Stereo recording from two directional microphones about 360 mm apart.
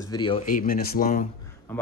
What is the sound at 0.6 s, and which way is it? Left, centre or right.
Speech, left.